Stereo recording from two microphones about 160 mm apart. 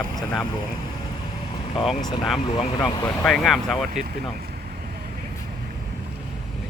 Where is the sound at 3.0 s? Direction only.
5° left (ahead or behind).